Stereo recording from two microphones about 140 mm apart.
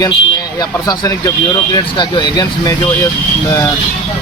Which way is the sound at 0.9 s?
25° left (ahead or behind).